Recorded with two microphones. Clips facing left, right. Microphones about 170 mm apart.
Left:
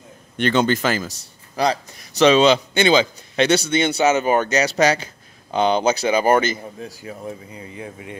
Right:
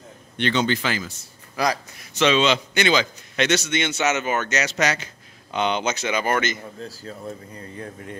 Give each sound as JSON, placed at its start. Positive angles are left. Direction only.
{"t": 0.4, "sound": "a man's voice", "side_deg": 45}
{"t": 1.6, "sound": "a man's voice", "side_deg": 30}
{"t": 6.8, "sound": "speech", "side_deg": 15}